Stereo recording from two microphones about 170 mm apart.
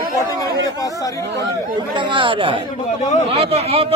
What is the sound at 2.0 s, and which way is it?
Speech, 30° right (ahead or behind).